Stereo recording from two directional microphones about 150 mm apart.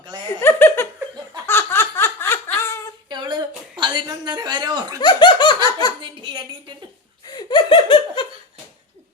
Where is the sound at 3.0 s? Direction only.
30° right (ahead or behind).